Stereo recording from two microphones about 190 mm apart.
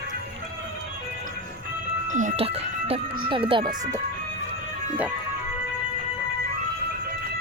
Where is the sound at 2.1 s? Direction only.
40° right (ahead or behind).